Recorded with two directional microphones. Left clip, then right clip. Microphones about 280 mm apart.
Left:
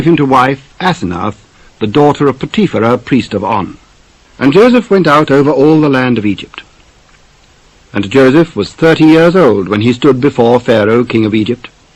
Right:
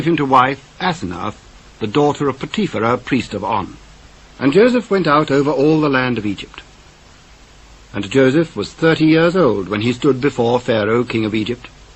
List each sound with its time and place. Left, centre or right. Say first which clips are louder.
0.0 s speech: left 5 dB; left
7.9 s speech: left 7 dB; left